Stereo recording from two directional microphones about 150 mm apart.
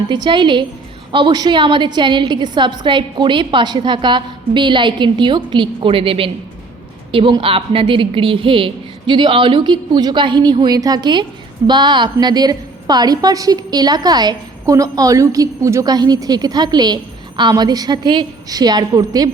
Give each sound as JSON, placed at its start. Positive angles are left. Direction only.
{"t": 0.1, "sound": "a woman's voice", "side_deg": -30}